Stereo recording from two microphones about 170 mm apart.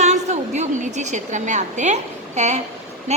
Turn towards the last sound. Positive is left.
turn(degrees=-40)  # may be behind; listen again after turning